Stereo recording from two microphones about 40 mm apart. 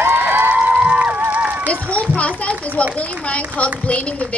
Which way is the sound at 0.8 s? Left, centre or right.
Right.